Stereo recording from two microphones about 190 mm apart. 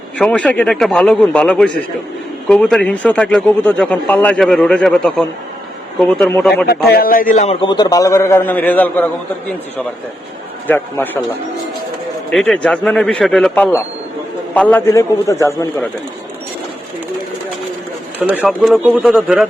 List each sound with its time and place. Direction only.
0.2 s a man's voice: 5° left (ahead or behind)
6.7 s a man's voice: 55° left (ahead or behind); by 9.0 s 10° left (ahead or behind)
10.7 s a man's voice: 10° left (ahead or behind)
12.3 s a man's voice: centre (ahead or behind)
18.2 s a man's voice: 10° right (ahead or behind)